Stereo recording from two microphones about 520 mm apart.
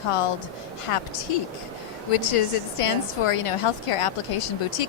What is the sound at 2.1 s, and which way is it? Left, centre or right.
A woman's voice, left.